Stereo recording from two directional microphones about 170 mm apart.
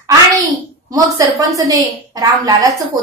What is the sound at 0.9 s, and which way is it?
A woman's voice, 20° right (ahead or behind).